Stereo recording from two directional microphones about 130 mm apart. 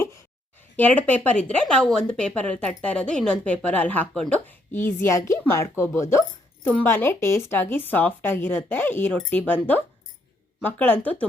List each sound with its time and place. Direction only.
0.8 s speech: 10° left (ahead or behind)